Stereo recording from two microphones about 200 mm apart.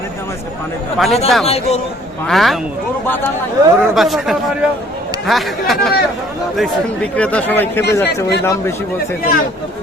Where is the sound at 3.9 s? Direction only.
Centre (ahead or behind).